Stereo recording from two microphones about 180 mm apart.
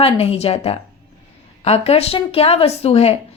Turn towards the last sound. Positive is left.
turn(degrees=35)  # may be behind; listen again after turning